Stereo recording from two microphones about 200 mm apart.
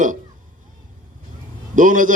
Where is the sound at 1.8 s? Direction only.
40° right (ahead or behind).